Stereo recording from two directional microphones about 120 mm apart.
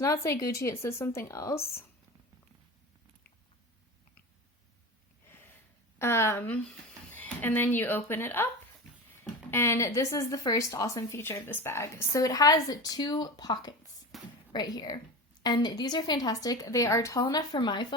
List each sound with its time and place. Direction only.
0.0 s speech: 25° left (ahead or behind)
5.3 s a sound: 20° left (ahead or behind)
6.0 s speech: 20° left (ahead or behind)
9.5 s speech: 20° left (ahead or behind)
14.1 s a woman's voice: centre (ahead or behind)
14.5 s a woman's voice: 35° left (ahead or behind)